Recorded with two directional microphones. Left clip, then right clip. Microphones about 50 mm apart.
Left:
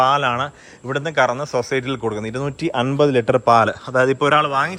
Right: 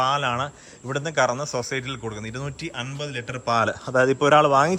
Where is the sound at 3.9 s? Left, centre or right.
Right.